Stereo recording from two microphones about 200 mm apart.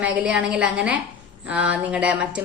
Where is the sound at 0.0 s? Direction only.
5° right (ahead or behind).